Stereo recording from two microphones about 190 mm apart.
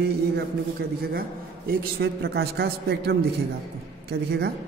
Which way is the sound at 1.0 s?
55° right (ahead or behind).